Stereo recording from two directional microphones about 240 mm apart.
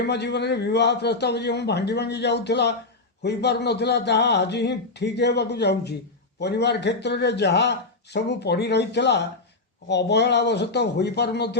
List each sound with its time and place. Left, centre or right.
0.1 s a man's voice: left